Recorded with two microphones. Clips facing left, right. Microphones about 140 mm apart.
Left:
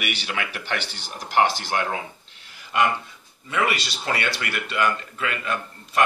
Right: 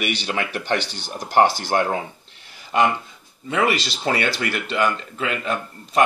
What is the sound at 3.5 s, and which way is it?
Speech, 30° right (ahead or behind).